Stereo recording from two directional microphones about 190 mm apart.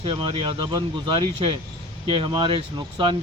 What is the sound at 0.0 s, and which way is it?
Speech, 25° right (ahead or behind).